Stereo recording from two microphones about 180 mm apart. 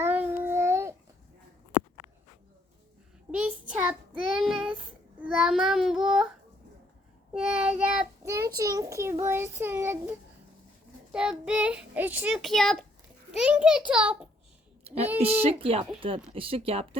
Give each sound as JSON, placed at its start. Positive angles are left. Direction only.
{"t": 0.0, "sound": "babbling", "side_deg": -10}
{"t": 3.3, "sound": "child singing", "side_deg": -5}
{"t": 4.4, "sound": "a child's voice", "side_deg": 0}
{"t": 7.3, "sound": "a child's voice", "side_deg": -5}
{"t": 14.8, "sound": "a woman's voice", "side_deg": -35}